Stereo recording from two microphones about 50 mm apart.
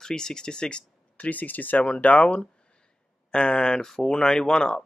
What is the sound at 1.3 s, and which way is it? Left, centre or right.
Speech, left.